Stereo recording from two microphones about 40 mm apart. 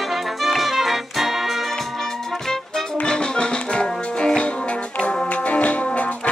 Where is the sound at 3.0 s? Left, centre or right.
Left.